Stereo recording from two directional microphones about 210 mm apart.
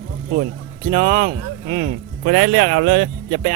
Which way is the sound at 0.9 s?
35° right (ahead or behind).